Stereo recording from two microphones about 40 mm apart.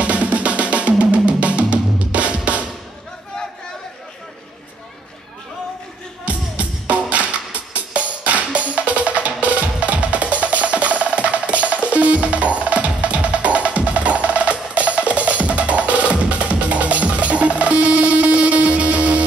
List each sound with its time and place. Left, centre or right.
0.0 s music: right
6.2 s music: right